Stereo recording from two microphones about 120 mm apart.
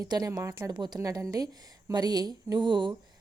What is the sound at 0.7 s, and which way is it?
A woman's voice, 35° right (ahead or behind).